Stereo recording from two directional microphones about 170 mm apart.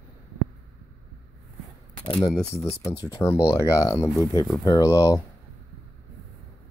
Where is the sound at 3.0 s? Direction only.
20° left (ahead or behind).